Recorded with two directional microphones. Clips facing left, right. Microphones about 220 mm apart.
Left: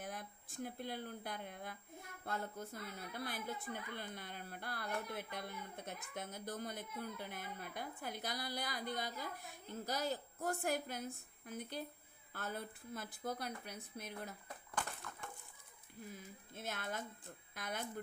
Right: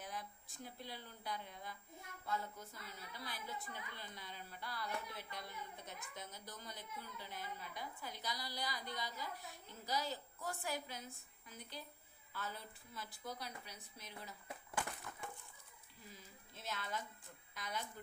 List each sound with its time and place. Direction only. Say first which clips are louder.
0.0 s a woman's voice: left 2 dB; 55° left (ahead or behind)
15.1 s chicken: even; 10° right (ahead or behind)
16.1 s a woman's voice: left 7 dB; 55° left (ahead or behind)